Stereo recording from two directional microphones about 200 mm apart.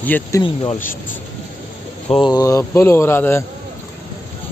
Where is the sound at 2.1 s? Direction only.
20° left (ahead or behind).